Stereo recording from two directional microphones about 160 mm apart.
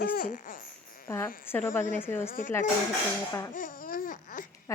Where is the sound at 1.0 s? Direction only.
15° left (ahead or behind).